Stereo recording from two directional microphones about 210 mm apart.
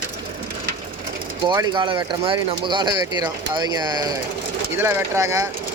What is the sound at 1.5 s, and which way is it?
Speech, 20° right (ahead or behind).